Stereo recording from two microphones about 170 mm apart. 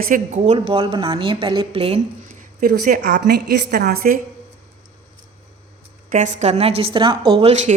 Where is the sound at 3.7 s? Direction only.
65° right (ahead or behind).